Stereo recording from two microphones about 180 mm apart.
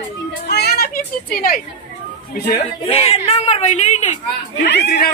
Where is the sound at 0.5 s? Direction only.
65° left (ahead or behind).